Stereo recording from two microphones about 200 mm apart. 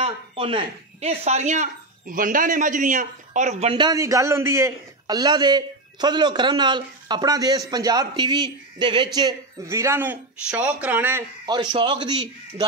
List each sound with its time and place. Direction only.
0.0 s speech: 25° right (ahead or behind); by 11.2 s 10° right (ahead or behind)
11.4 s speech: 20° right (ahead or behind)